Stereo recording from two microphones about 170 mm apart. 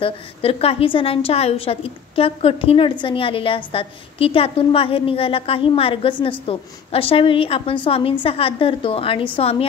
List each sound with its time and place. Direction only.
0.0 s a woman's voice: 35° left (ahead or behind)